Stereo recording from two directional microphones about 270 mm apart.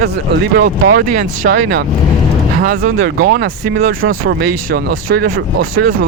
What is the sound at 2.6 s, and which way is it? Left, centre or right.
Speech, right.